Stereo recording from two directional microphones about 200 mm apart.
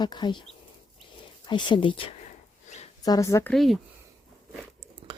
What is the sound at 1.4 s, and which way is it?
A woman's voice, 25° left (ahead or behind).